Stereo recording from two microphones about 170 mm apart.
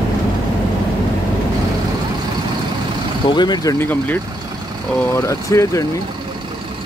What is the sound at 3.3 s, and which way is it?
Speech, 25° left (ahead or behind).